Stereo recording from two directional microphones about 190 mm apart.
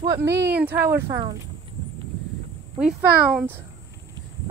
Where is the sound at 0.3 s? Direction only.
60° right (ahead or behind).